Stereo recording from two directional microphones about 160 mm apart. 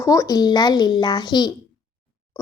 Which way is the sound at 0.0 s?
20° left (ahead or behind).